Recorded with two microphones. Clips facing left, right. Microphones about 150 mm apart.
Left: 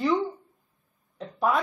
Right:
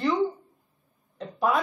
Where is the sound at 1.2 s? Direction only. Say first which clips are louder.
Even; centre (ahead or behind).